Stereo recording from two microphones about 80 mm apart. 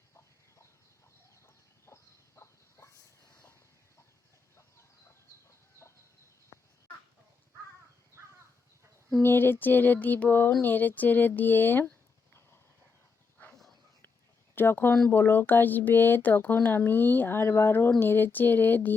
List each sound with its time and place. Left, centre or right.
1.9 s a sound: left
4.5 s chicken: left
9.1 s speech: left
13.5 s dog: centre
14.5 s speech: left